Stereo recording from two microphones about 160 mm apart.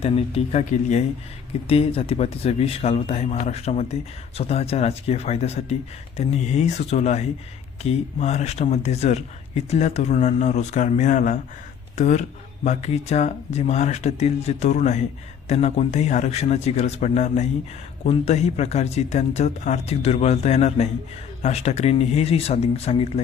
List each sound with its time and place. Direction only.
0.0 s speech: 40° left (ahead or behind)